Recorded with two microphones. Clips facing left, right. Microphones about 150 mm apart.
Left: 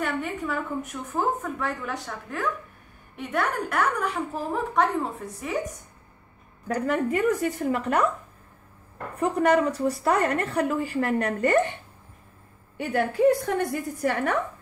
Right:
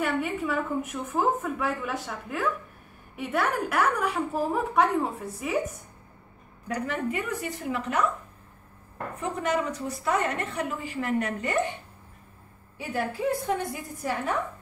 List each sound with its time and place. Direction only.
0.0 s a woman's voice: 5° right (ahead or behind)
6.7 s a woman's voice: 45° left (ahead or behind)
9.2 s a woman's voice: 50° left (ahead or behind)
12.7 s a woman's voice: 65° left (ahead or behind)